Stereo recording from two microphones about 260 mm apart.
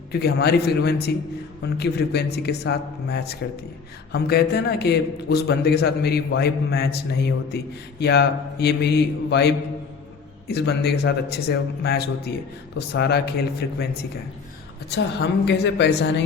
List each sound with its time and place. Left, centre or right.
0.1 s a man's voice: left
10.5 s a man's voice: left
14.8 s a man's voice: left